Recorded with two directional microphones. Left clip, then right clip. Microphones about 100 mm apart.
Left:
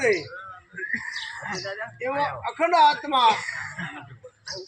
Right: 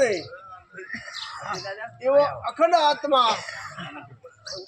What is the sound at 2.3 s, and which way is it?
Speech, 45° right (ahead or behind).